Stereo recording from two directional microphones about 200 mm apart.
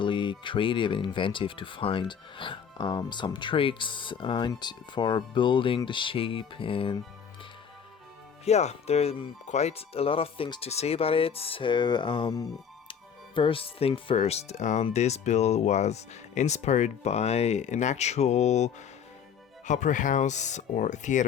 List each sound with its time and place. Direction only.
0.0 s speech: 25° left (ahead or behind)
8.4 s speech: 35° left (ahead or behind)